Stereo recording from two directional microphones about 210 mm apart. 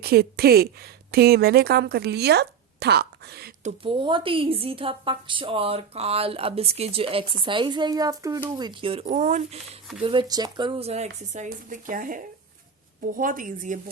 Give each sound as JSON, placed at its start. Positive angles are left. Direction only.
{"t": 0.0, "sound": "a woman's voice", "side_deg": -50}
{"t": 3.6, "sound": "a woman's voice", "side_deg": -30}
{"t": 10.0, "sound": "speech", "side_deg": -25}